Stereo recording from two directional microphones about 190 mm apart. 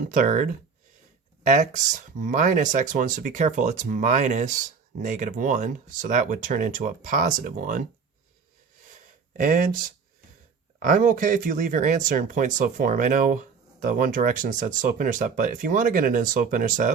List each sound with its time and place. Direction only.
0.1 s speech: 40° right (ahead or behind)
8.9 s a sound: 45° right (ahead or behind)
10.8 s speech: 45° right (ahead or behind)